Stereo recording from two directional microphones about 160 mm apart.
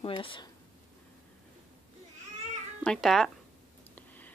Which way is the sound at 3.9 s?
10° left (ahead or behind).